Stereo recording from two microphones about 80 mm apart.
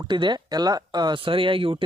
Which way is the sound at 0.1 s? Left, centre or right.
Right.